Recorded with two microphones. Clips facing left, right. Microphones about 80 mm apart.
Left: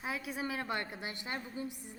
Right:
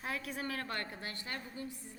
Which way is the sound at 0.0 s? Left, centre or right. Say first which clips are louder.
Left 2 dB; centre.